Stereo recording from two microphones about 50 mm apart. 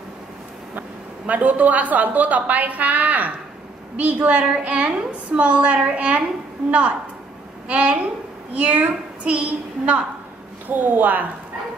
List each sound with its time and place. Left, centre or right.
0.7 s a woman's voice: right
7.6 s a woman's voice: right
10.7 s a woman's voice: right